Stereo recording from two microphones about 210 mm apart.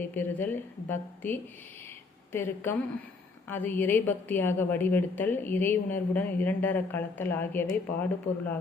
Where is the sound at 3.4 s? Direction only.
10° left (ahead or behind).